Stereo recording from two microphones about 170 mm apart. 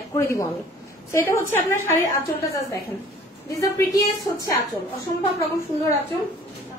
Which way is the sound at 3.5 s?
20° left (ahead or behind).